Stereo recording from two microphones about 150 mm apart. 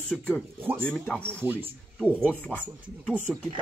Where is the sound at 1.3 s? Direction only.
15° right (ahead or behind).